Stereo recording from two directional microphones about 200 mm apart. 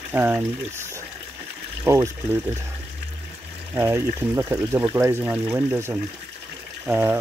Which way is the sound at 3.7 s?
10° right (ahead or behind).